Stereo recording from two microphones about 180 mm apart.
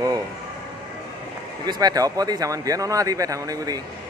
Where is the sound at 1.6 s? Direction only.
20° right (ahead or behind).